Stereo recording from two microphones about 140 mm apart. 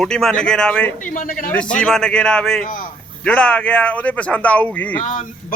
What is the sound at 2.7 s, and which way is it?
Speech, 75° left (ahead or behind).